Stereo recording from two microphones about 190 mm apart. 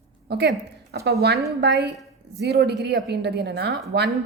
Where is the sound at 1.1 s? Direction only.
55° right (ahead or behind).